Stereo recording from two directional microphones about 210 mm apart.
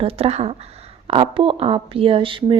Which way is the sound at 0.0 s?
25° right (ahead or behind).